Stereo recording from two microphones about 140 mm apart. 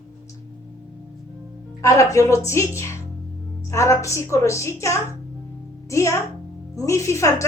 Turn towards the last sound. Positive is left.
turn(degrees=20)  # may be behind; listen again after turning